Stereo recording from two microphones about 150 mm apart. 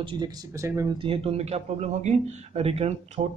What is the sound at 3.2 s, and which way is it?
Speech, 30° right (ahead or behind).